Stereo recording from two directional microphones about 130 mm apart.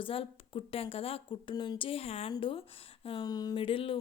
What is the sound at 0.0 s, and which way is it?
Speech, 45° left (ahead or behind).